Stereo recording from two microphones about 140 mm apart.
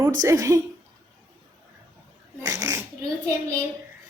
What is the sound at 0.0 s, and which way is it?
Speech, 25° right (ahead or behind).